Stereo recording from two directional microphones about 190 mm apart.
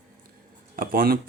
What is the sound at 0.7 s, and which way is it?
Speech, 50° right (ahead or behind).